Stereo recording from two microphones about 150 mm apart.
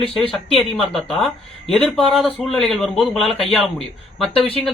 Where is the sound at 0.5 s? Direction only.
Centre (ahead or behind).